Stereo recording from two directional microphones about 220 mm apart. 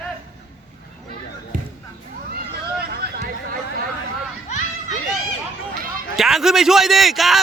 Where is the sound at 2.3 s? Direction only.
45° right (ahead or behind).